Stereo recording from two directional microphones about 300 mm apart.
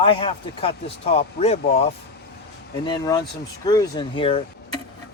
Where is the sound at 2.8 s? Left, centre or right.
Centre.